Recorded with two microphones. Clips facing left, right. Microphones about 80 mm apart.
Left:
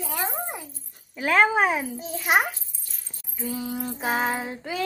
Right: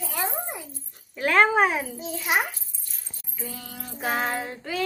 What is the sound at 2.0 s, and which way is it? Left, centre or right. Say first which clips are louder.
Speech: left 4 dB; left.